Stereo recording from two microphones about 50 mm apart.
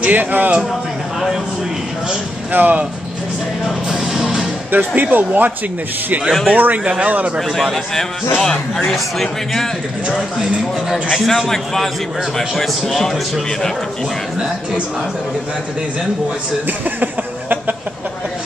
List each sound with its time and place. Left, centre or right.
0.0 s speech: right
2.5 s speech: right
3.9 s music: centre
4.6 s speech: right
6.5 s speech: right
6.8 s speech: centre
7.1 s a man's voice: right
7.3 s a man's voice: centre
10.9 s a man's voice: centre
11.2 s a man's voice: centre
16.6 s a sound: right